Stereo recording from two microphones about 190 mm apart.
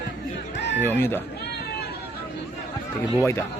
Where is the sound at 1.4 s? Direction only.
60° left (ahead or behind).